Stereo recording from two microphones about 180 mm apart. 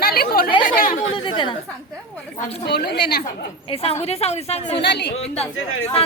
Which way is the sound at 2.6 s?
65° left (ahead or behind).